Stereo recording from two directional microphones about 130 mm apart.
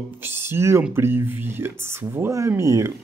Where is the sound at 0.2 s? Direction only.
20° right (ahead or behind).